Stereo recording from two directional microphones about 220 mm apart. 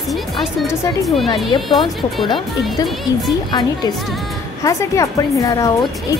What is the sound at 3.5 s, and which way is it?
A woman's voice, 20° left (ahead or behind).